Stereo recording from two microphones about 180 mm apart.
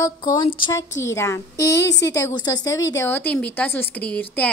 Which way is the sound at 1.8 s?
75° left (ahead or behind).